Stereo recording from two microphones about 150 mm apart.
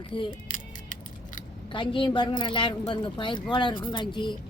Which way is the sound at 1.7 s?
35° left (ahead or behind).